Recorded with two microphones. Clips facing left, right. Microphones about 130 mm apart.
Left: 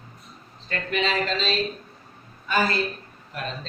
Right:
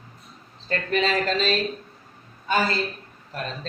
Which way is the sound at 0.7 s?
40° right (ahead or behind).